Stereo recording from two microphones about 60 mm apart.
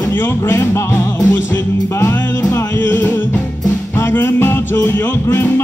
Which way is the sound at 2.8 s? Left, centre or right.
Left.